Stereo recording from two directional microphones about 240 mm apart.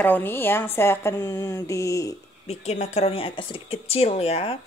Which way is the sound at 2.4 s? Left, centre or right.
Left.